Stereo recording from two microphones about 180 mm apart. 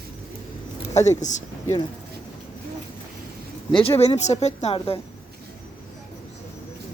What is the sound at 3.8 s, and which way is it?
Speech, 30° left (ahead or behind).